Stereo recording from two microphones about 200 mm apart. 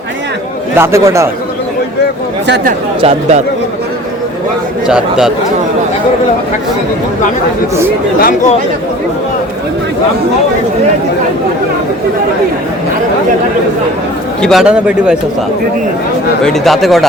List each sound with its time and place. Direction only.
0.8 s speech: 15° right (ahead or behind)
3.0 s speech: 30° right (ahead or behind)
4.9 s a man's voice: 5° right (ahead or behind)
8.2 s speech: 40° left (ahead or behind)
14.4 s a man's voice: centre (ahead or behind)
16.4 s a man's voice: centre (ahead or behind)